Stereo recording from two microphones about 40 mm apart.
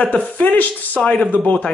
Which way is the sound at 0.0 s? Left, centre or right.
Left.